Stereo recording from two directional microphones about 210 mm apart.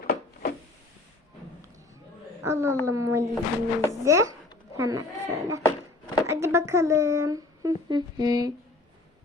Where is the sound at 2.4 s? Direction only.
10° right (ahead or behind).